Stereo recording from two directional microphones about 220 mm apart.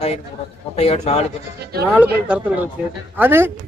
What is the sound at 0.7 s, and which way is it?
Speech, 25° left (ahead or behind).